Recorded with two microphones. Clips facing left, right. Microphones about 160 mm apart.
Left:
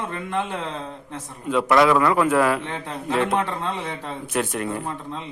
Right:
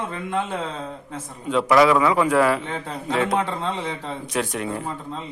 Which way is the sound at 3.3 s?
15° right (ahead or behind).